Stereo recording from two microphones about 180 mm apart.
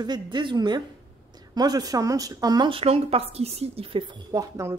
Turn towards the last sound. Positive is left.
turn(degrees=-15)  # may be behind; listen again after turning